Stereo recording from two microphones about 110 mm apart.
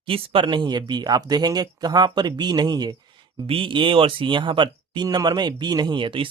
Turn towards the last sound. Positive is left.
turn(degrees=-50)  # may be behind; listen again after turning